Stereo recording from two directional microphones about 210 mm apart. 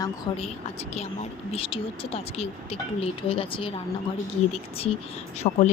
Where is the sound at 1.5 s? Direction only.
25° left (ahead or behind).